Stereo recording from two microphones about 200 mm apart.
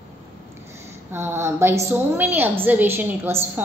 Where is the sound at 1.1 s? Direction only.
10° right (ahead or behind).